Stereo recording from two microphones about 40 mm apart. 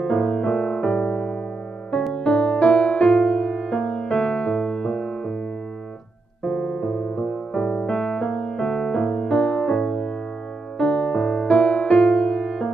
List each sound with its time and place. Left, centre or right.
0.1 s music: left
0.4 s music: centre
0.8 s music: left
6.4 s piano: centre
7.2 s music: left
8.3 s keyboard: left
8.5 s music: centre